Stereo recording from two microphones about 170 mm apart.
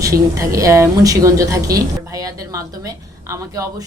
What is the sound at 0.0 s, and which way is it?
A woman's voice, 20° right (ahead or behind).